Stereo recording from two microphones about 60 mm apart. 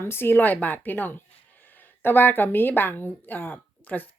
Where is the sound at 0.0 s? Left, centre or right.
Left.